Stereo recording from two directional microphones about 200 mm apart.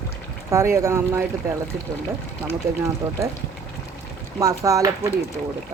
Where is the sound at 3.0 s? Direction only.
10° right (ahead or behind).